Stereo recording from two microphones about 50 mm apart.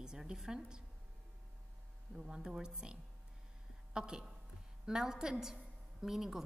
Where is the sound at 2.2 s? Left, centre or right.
Centre.